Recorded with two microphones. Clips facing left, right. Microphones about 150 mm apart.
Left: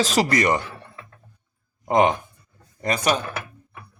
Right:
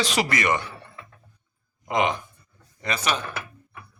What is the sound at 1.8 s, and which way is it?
Speech, 45° left (ahead or behind).